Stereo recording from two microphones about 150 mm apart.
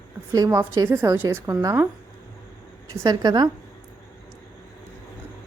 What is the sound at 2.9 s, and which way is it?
Speech, 25° right (ahead or behind).